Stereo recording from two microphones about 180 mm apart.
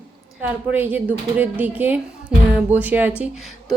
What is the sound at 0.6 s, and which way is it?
A woman's voice, 10° right (ahead or behind).